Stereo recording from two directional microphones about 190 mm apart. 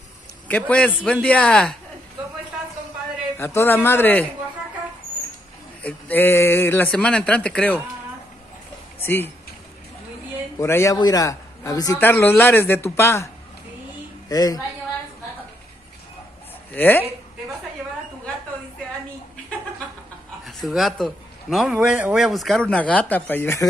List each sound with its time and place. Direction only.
0.5 s a man's voice: 5° left (ahead or behind)
3.3 s a man's voice: 15° left (ahead or behind)
5.8 s a man's voice: 10° left (ahead or behind)
9.0 s a man's voice: 10° left (ahead or behind)
10.6 s a man's voice: 15° left (ahead or behind)
14.3 s a man's voice: 20° left (ahead or behind)
16.7 s a man's voice: 10° left (ahead or behind)
20.4 s a man's voice: centre (ahead or behind)